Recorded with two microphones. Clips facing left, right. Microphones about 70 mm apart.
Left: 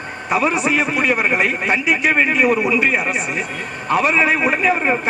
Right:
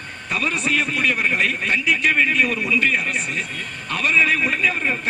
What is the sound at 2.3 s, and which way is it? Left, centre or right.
A man's voice, centre.